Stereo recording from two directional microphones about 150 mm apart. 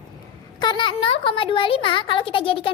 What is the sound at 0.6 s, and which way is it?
Speech, 30° left (ahead or behind).